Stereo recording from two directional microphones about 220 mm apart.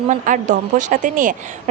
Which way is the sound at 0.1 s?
35° right (ahead or behind).